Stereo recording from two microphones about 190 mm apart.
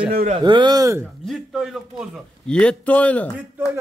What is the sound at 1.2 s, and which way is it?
A man's voice, centre (ahead or behind).